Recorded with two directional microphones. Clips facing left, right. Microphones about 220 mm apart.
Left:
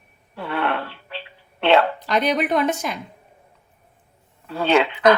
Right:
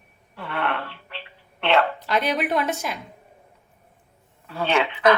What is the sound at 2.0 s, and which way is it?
Speech, centre (ahead or behind).